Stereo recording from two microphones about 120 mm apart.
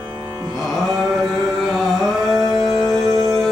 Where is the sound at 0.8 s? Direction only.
Centre (ahead or behind).